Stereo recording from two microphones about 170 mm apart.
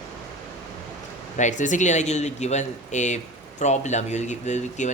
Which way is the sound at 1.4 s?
45° left (ahead or behind).